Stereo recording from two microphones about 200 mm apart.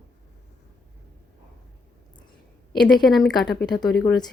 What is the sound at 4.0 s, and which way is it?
Speech, 15° left (ahead or behind).